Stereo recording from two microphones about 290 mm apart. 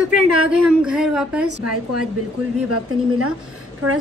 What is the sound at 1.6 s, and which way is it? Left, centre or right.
A woman's voice, right.